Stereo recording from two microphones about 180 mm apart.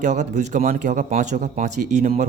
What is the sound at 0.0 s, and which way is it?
Speech, 40° right (ahead or behind).